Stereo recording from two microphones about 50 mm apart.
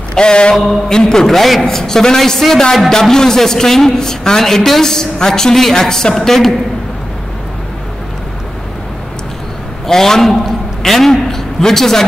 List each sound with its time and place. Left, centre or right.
0.1 s a man's voice: centre
9.8 s a man's voice: centre